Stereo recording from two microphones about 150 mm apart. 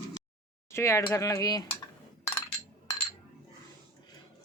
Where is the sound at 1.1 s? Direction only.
20° left (ahead or behind).